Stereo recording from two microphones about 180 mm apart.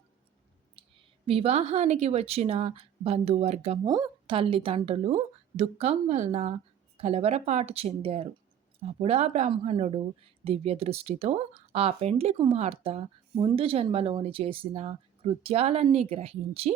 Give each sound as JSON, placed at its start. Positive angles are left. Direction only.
{"t": 1.3, "sound": "speech", "side_deg": -35}
{"t": 3.8, "sound": "speech", "side_deg": -20}